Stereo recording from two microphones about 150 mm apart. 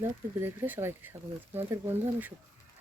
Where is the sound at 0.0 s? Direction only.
15° right (ahead or behind).